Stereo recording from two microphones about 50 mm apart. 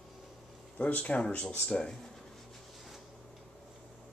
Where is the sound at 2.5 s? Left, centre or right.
Centre.